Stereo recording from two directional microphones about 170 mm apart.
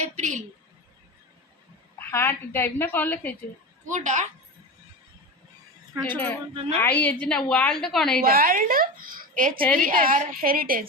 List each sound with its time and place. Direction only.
0.0 s a woman's voice: 45° right (ahead or behind)
2.0 s a woman's voice: 15° left (ahead or behind)
3.8 s a woman's voice: 45° right (ahead or behind)
6.1 s a woman's voice: 10° left (ahead or behind)
8.2 s a woman's voice: 60° right (ahead or behind)